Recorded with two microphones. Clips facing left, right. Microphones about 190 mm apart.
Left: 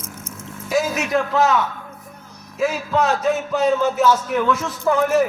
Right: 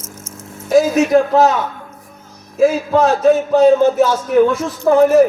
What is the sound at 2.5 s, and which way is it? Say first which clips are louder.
A man's voice: right 7 dB; 35° right (ahead or behind).